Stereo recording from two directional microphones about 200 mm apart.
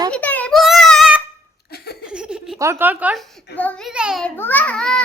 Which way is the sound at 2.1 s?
5° right (ahead or behind).